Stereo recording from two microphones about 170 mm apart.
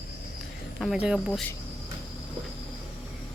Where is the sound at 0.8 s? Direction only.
5° right (ahead or behind).